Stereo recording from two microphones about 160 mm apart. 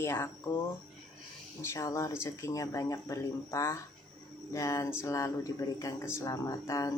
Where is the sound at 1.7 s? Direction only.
20° left (ahead or behind).